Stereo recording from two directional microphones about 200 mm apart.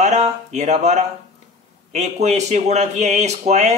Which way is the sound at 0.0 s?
35° right (ahead or behind).